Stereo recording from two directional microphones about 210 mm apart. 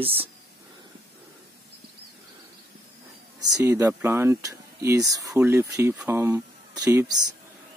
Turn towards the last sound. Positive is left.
turn(degrees=-15)  # may be behind; listen again after turning